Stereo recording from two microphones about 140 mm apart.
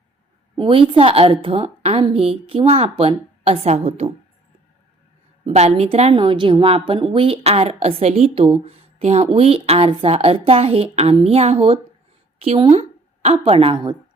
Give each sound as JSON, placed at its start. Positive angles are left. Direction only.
{"t": 0.5, "sound": "a woman's voice", "side_deg": -40}
{"t": 5.5, "sound": "a woman's voice", "side_deg": -50}